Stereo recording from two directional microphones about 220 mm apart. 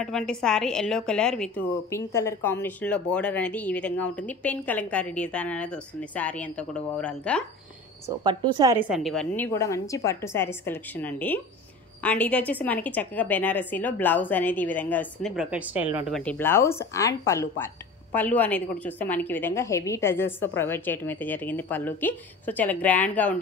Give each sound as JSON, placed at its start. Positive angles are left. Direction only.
{"t": 0.0, "sound": "a woman's voice", "side_deg": 5}
{"t": 8.2, "sound": "a woman's voice", "side_deg": -20}
{"t": 8.7, "sound": "a woman's voice", "side_deg": -5}
{"t": 15.3, "sound": "a woman's voice", "side_deg": -5}
{"t": 16.2, "sound": "a woman's voice", "side_deg": 5}